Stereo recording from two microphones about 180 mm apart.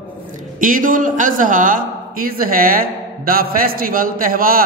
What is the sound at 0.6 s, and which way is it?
A man's voice, 50° right (ahead or behind).